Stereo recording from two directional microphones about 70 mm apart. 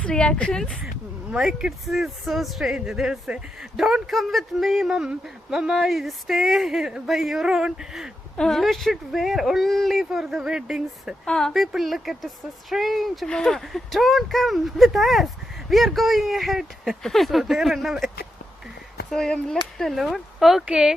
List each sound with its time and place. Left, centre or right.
0.0 s speech: centre
1.5 s speech: centre
8.4 s speech: centre
11.3 s speech: centre
11.5 s speech: centre
13.2 s speech: centre
19.1 s speech: centre
20.7 s speech: centre